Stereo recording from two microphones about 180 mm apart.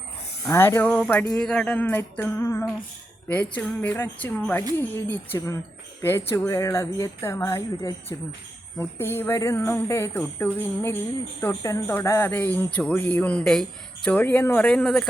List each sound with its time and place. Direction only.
0.4 s speech: 15° left (ahead or behind)